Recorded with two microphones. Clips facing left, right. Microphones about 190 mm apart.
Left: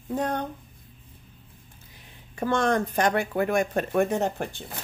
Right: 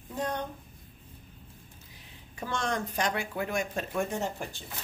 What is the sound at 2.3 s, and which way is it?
Speech, 55° left (ahead or behind).